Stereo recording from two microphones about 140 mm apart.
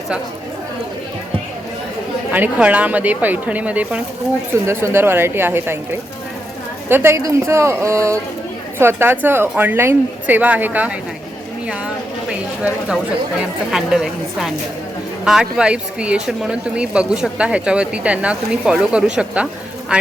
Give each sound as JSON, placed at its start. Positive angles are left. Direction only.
{"t": 2.3, "sound": "a man's voice", "side_deg": -10}
{"t": 13.4, "sound": "a woman's voice", "side_deg": -5}